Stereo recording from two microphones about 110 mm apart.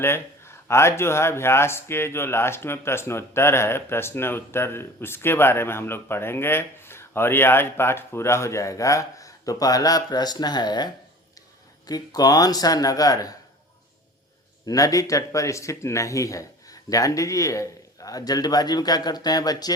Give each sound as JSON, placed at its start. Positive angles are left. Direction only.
{"t": 0.0, "sound": "speech", "side_deg": 25}
{"t": 11.9, "sound": "speech", "side_deg": 35}
{"t": 14.7, "sound": "speech", "side_deg": 30}